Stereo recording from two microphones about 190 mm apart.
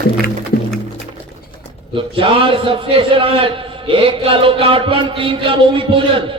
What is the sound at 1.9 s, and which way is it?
A man's voice, 30° right (ahead or behind).